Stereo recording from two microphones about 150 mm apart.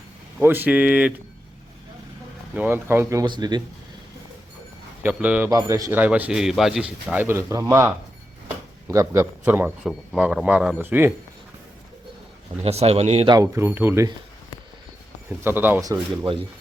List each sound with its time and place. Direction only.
0.3 s a man's voice: 10° right (ahead or behind)
2.6 s speech: 15° right (ahead or behind)
5.0 s a man's voice: 10° right (ahead or behind)
5.5 s speech: 25° right (ahead or behind)
6.0 s a man's voice: 10° right (ahead or behind)
12.6 s speech: 45° right (ahead or behind)
13.2 s a man's voice: 25° right (ahead or behind)
15.4 s a man's voice: 15° right (ahead or behind)
15.8 s speech: 30° right (ahead or behind)